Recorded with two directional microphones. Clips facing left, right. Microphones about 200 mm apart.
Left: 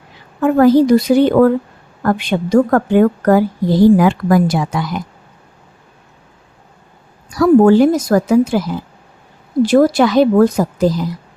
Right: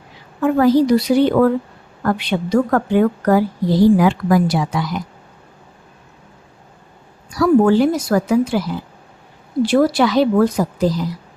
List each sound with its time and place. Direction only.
0.4 s a woman's voice: 50° left (ahead or behind)
7.3 s a woman's voice: 50° left (ahead or behind)
9.6 s a woman's voice: 45° left (ahead or behind)